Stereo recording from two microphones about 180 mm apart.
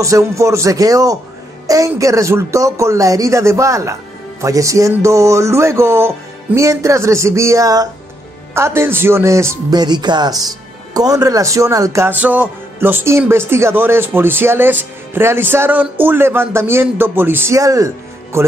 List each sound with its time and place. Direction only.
0.0 s speech: 15° right (ahead or behind)